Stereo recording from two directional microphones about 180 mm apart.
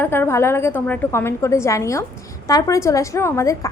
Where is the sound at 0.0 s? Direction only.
10° left (ahead or behind).